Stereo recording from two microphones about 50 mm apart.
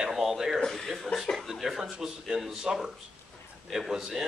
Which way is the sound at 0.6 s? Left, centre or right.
Centre.